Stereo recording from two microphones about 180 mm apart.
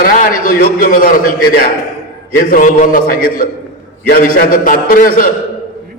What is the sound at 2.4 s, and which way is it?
A man's voice, 50° left (ahead or behind).